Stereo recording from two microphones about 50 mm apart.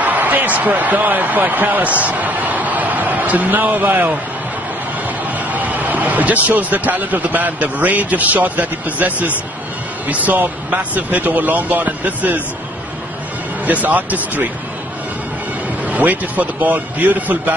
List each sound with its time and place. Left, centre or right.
0.0 s speech: right
5.5 s a man's voice: right
13.7 s a man's voice: right
15.8 s a man's voice: right